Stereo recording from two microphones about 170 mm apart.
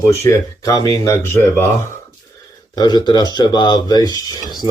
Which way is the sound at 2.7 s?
25° left (ahead or behind).